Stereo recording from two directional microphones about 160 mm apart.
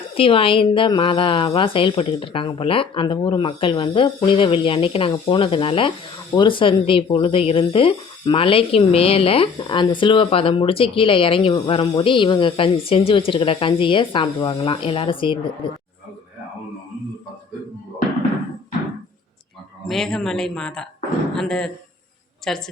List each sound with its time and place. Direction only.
0.1 s speech: 35° left (ahead or behind)
19.9 s speech: centre (ahead or behind)